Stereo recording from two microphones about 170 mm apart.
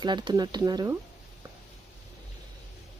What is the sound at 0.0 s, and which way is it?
Speech, 25° right (ahead or behind).